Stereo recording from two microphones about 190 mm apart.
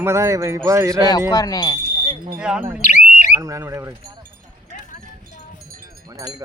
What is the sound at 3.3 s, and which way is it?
Speech, 15° right (ahead or behind).